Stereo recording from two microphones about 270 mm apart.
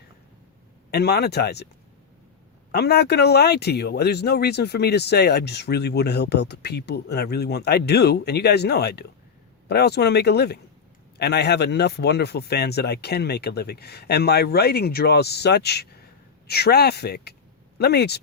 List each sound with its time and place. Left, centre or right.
0.9 s speech: left
2.7 s speech: left